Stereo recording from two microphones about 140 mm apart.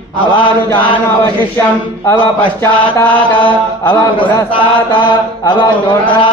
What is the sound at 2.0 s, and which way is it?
Mantra, 15° left (ahead or behind).